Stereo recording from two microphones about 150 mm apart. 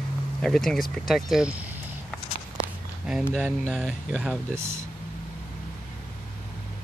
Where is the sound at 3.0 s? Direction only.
5° right (ahead or behind).